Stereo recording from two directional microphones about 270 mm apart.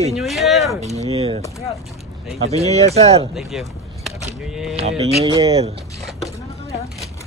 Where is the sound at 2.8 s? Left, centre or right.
Right.